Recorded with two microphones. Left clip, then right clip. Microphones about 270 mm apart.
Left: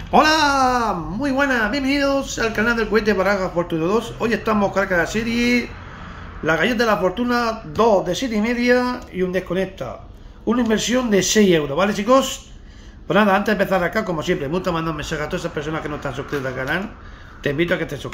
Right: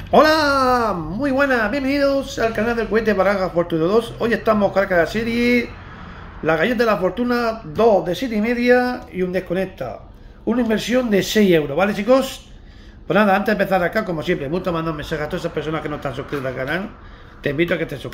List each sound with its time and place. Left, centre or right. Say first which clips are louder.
0.1 s speech: right 1 dB; centre